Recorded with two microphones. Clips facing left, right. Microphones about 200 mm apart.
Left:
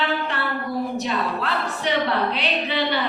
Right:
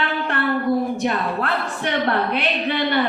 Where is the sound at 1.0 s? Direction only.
55° right (ahead or behind).